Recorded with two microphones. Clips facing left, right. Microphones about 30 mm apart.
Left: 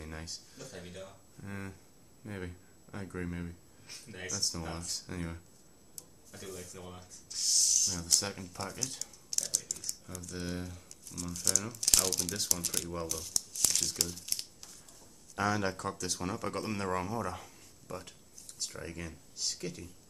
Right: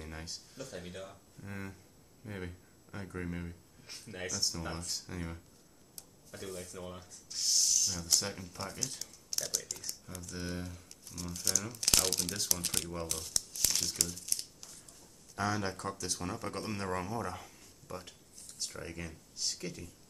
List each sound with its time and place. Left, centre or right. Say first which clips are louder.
0.0 s speech: left 1 dB; centre
5.0 s speech: left 2 dB; centre
6.4 s speech: right 2 dB; centre
10.4 s speech: left 1 dB; centre; by 12.9 s right
13.2 s crumpling: even; centre
13.7 s speech: left 1 dB; centre
14.6 s a sound: even; centre
15.4 s speech: left 3 dB; centre